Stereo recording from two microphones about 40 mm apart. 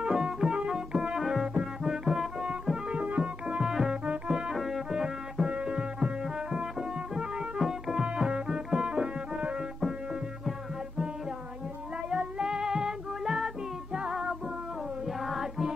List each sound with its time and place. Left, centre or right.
0.0 s music: centre
1.4 s music: right
1.9 s music: centre
3.4 s music: centre
3.9 s music: right
4.3 s music: centre
4.9 s music: centre
7.2 s music: centre
12.1 s female singing: centre
13.9 s music: centre